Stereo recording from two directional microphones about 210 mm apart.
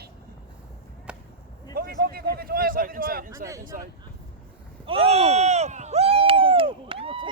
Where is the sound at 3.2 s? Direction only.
15° right (ahead or behind).